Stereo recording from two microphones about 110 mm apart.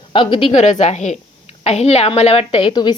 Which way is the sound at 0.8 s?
90° left.